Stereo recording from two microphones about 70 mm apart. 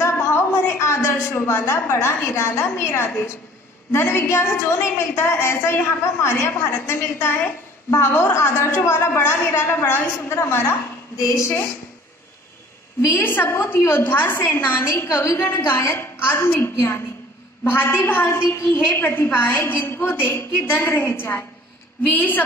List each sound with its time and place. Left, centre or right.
0.0 s a sound: left
3.9 s a woman's voice: left
13.1 s a woman's voice: left